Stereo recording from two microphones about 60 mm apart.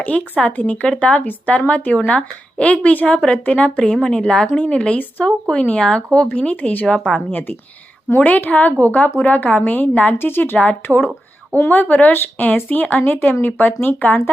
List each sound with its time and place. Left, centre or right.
0.0 s speech: left
3.8 s a woman's voice: centre; by 10.2 s left
10.2 s a woman's voice: left